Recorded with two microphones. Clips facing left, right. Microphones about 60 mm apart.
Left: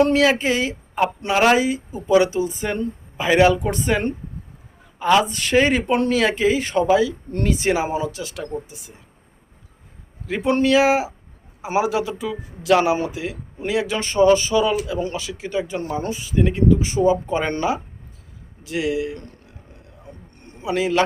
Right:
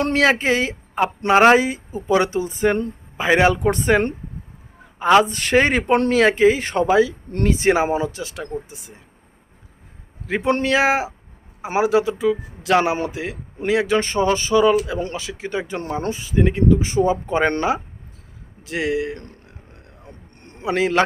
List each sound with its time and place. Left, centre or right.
0.0 s speech: right
4.9 s speech: right
10.2 s speech: right
18.6 s a sound: right